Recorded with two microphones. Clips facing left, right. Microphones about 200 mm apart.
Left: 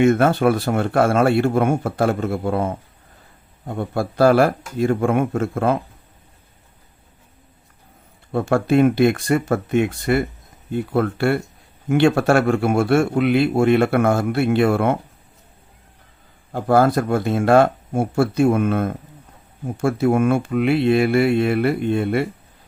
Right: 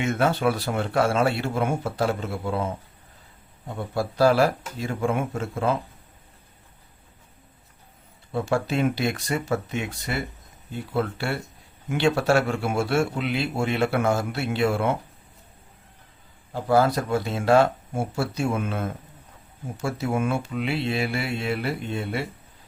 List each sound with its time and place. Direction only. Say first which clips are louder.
0.0 s speech: left 7 dB; 50° left (ahead or behind)
3.8 s a man's voice: left 4 dB; 55° left (ahead or behind)
8.3 s a man's voice: left 7 dB; 55° left (ahead or behind)
16.5 s a man's voice: left 4 dB; 55° left (ahead or behind)